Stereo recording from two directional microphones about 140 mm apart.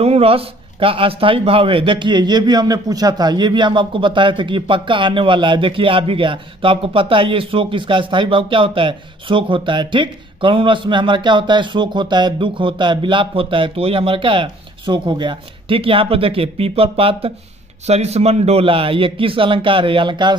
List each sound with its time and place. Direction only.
0.0 s a man's voice: 45° right (ahead or behind)